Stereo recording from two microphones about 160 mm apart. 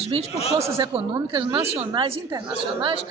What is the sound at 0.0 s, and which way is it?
A man's voice, 40° right (ahead or behind).